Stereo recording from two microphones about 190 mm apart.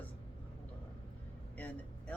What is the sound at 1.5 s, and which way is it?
Speech, 10° left (ahead or behind).